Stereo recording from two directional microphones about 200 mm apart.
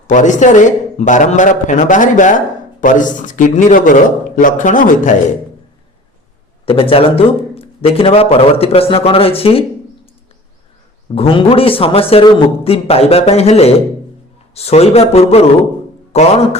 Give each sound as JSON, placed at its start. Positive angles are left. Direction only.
{"t": 0.1, "sound": "a man's voice", "side_deg": 40}
{"t": 6.7, "sound": "a man's voice", "side_deg": 25}
{"t": 11.1, "sound": "a man's voice", "side_deg": 25}